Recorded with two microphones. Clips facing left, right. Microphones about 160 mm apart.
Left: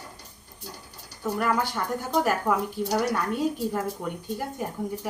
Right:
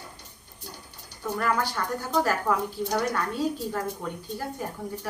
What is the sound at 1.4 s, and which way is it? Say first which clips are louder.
A woman's voice: left 1 dB; 20° left (ahead or behind).